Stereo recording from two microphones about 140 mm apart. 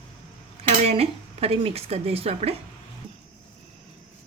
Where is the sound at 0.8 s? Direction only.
45° right (ahead or behind).